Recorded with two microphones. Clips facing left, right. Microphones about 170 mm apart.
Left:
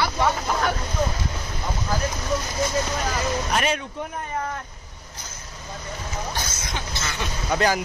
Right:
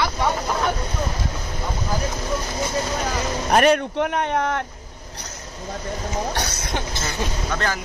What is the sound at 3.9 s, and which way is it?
Speech, 75° right (ahead or behind).